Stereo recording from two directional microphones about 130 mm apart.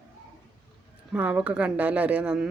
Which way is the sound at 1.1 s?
10° right (ahead or behind).